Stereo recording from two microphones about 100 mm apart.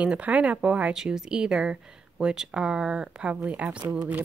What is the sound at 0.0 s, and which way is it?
A woman's voice, 15° right (ahead or behind).